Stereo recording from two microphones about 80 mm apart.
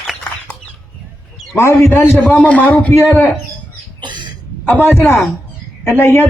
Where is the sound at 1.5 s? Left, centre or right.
Left.